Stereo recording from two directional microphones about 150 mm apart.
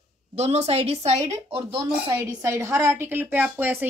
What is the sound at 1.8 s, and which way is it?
A woman's voice, 20° right (ahead or behind).